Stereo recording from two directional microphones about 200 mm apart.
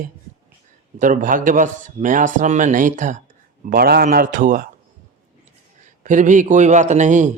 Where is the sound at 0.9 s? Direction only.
40° right (ahead or behind).